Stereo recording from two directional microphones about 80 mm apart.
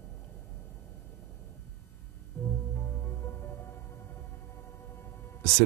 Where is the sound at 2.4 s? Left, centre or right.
Left.